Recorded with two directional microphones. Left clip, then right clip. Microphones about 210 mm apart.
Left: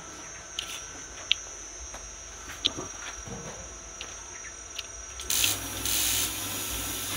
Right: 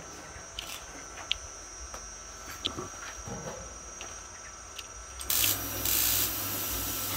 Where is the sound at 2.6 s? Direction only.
10° right (ahead or behind).